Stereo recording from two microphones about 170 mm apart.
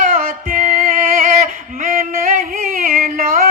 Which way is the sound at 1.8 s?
55° right (ahead or behind).